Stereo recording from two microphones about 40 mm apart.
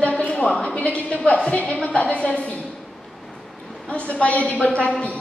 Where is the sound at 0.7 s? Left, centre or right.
Left.